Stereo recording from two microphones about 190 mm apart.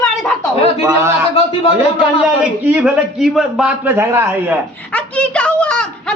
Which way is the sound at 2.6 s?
5° right (ahead or behind).